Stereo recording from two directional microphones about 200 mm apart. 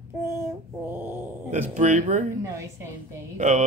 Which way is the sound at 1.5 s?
35° right (ahead or behind).